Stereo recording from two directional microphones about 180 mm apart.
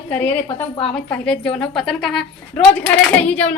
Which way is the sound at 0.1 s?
10° left (ahead or behind).